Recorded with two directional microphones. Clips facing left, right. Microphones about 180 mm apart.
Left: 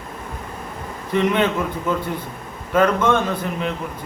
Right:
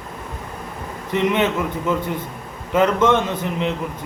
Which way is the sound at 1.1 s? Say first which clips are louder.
Even; 20° right (ahead or behind).